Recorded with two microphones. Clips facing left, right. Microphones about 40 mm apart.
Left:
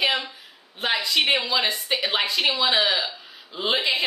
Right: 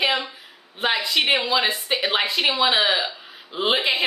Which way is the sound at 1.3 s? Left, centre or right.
Right.